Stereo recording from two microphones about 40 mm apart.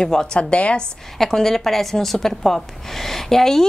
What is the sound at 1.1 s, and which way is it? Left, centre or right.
A woman's voice, centre.